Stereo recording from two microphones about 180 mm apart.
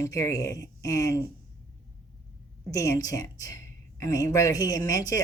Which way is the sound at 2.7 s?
20° left (ahead or behind).